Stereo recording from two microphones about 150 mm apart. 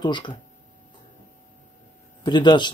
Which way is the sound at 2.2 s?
30° left (ahead or behind).